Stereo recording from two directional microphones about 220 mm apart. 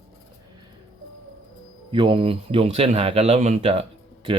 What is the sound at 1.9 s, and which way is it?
A man's voice, 25° right (ahead or behind).